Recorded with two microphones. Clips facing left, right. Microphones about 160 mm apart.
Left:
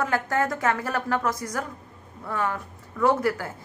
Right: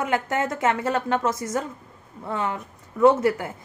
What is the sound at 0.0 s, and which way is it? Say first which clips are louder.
A woman's voice: even; 20° right (ahead or behind).